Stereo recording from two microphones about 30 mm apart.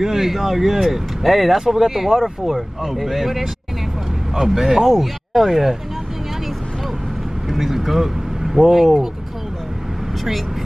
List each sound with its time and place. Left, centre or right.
0.0 s speech: centre
4.4 s speech: centre
4.8 s speech: centre
7.4 s speech: centre